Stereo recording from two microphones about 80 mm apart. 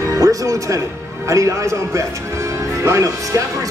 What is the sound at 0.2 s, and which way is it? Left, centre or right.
Speech, right.